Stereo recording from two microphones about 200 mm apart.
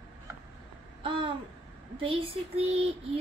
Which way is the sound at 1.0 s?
25° right (ahead or behind).